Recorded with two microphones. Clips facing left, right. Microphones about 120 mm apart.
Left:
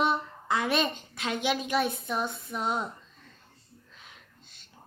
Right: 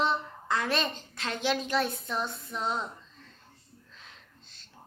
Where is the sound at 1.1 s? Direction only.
5° left (ahead or behind).